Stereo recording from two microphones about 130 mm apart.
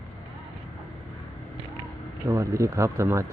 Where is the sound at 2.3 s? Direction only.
25° right (ahead or behind).